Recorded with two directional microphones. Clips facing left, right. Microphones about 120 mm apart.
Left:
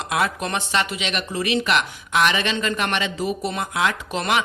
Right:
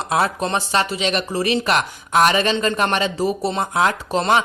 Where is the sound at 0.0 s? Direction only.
35° right (ahead or behind).